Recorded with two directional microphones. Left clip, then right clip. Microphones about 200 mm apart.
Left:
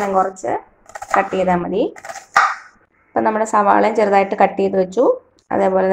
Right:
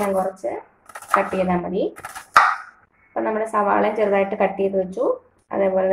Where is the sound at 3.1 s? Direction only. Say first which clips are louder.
Left 6 dB; 45° left (ahead or behind).